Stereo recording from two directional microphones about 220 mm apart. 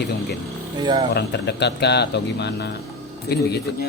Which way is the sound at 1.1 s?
50° left (ahead or behind).